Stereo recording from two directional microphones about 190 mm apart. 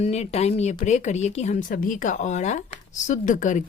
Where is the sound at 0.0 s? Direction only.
35° left (ahead or behind).